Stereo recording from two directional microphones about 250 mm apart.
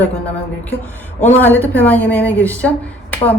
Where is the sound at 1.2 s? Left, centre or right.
Centre.